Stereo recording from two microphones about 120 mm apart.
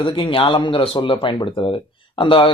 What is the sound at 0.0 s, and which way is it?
Speech, 45° left (ahead or behind).